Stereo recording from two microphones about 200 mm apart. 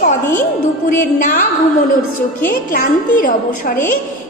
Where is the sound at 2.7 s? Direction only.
45° left (ahead or behind).